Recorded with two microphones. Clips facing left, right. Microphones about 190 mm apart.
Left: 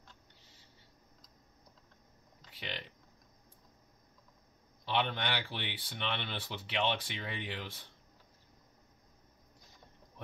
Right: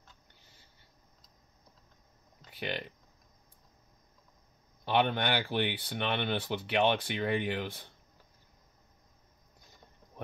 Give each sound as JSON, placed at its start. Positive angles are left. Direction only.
{"t": 2.5, "sound": "speech", "side_deg": -50}
{"t": 4.8, "sound": "speech", "side_deg": -50}